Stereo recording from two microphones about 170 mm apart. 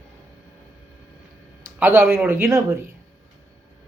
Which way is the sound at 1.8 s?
10° right (ahead or behind).